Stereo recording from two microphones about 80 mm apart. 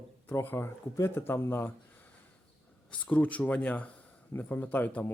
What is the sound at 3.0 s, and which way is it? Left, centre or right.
A man's voice, centre.